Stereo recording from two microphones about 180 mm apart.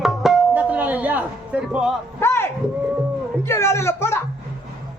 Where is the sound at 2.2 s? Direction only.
15° left (ahead or behind).